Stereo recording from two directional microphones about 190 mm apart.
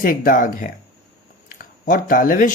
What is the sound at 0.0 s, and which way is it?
Speech, 45° left (ahead or behind).